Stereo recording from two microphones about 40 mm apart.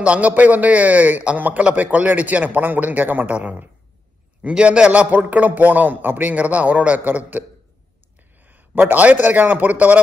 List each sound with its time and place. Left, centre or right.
0.0 s a man's voice: right
0.3 s a man's voice: right
4.9 s a man's voice: right
6.3 s a man's voice: right
7.1 s a man's voice: right
8.5 s a sound: right
9.0 s a man's voice: right